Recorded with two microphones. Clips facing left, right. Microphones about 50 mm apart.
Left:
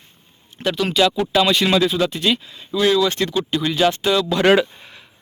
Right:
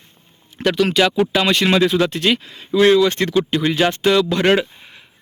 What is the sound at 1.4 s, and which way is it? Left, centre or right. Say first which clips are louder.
Speech: left 1 dB; right.